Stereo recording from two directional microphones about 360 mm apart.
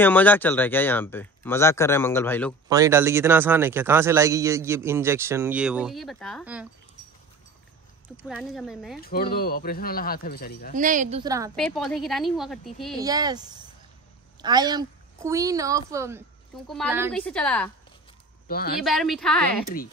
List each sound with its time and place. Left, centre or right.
0.0 s speech: centre
2.7 s a man's voice: centre
8.2 s speech: centre
9.0 s speech: left
10.7 s a man's voice: right; by 12.9 s centre
13.0 s a man's voice: centre
18.5 s speech: left
18.8 s speech: centre